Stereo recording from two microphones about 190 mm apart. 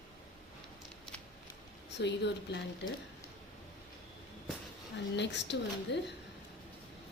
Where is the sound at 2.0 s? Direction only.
65° left (ahead or behind).